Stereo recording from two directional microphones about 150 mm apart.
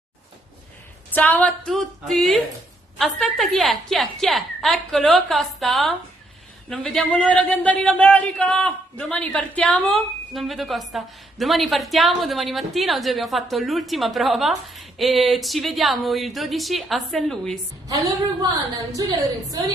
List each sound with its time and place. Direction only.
1.1 s a man's voice: 10° left (ahead or behind)
17.8 s a woman's voice: 25° right (ahead or behind)